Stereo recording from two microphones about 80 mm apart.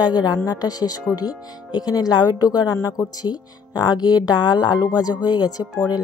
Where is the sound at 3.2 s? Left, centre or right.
Left.